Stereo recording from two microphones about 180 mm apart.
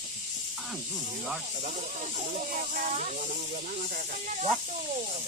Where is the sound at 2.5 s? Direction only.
45° right (ahead or behind).